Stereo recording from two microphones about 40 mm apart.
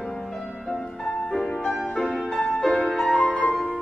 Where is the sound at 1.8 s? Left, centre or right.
Centre.